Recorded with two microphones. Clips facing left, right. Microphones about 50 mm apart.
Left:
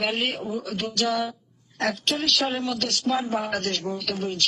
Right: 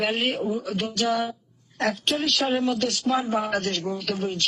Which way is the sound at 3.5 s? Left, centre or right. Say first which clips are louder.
Right 1 dB; right.